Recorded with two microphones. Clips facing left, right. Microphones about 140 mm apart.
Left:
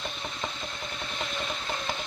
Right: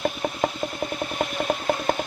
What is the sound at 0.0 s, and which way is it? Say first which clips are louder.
Engine: right 11 dB; 50° right (ahead or behind).